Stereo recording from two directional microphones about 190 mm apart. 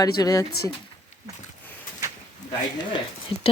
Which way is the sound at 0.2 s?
20° left (ahead or behind).